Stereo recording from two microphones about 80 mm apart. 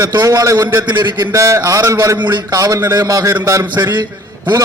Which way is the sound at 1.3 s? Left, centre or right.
Right.